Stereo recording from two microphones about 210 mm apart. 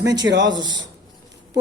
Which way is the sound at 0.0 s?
20° right (ahead or behind).